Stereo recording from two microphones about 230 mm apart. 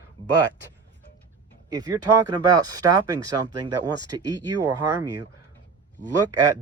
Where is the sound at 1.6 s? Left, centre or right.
Centre.